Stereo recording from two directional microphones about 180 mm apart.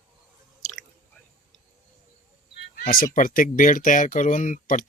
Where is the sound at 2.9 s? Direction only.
50° left (ahead or behind).